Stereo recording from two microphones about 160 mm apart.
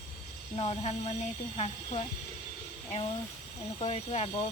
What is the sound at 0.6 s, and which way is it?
Speech, 40° left (ahead or behind).